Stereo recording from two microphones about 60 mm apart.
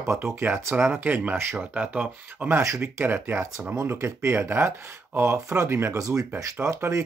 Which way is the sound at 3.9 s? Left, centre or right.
Right.